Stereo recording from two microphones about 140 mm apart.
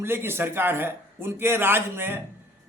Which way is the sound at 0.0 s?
15° right (ahead or behind).